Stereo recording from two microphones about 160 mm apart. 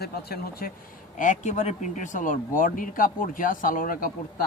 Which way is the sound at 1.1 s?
50° left (ahead or behind).